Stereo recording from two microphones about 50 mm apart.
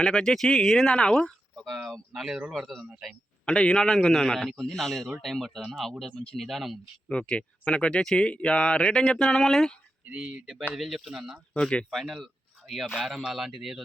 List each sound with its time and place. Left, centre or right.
0.0 s a man's voice: centre
1.5 s speech: centre
3.4 s a man's voice: centre
7.1 s a man's voice: left
10.1 s speech: right
10.8 s speech: centre
11.5 s speech: centre
11.9 s speech: centre